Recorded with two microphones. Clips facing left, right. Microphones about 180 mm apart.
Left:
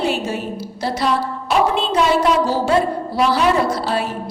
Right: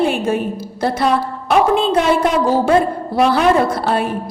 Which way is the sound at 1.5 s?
55° right (ahead or behind).